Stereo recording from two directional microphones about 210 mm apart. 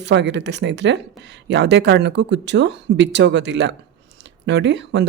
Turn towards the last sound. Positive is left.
turn(degrees=-55)  # may be behind; listen again after turning